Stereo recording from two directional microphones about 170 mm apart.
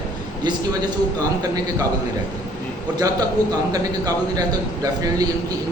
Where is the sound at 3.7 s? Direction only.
20° right (ahead or behind).